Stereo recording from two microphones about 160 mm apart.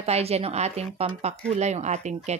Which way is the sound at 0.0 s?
40° right (ahead or behind).